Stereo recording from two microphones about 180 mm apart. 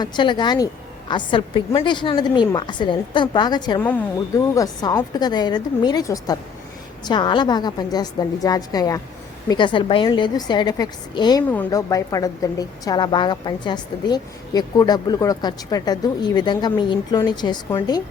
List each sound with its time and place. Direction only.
0.0 s a woman's voice: 25° left (ahead or behind)